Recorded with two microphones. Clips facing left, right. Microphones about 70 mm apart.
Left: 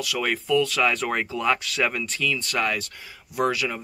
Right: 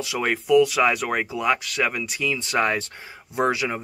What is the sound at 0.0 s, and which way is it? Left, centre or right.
Speech, right.